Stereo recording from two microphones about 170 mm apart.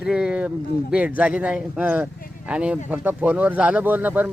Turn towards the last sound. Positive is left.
turn(degrees=-10)  # may be behind; listen again after turning